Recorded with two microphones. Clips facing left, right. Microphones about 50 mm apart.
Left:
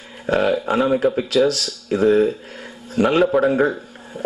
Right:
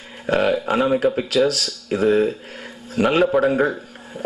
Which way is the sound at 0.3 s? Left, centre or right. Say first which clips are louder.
Even; centre.